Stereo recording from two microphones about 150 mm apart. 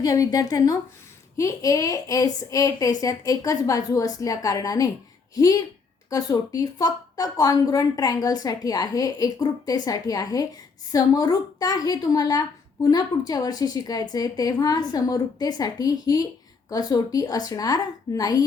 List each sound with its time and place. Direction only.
0.0 s speech: 25° left (ahead or behind)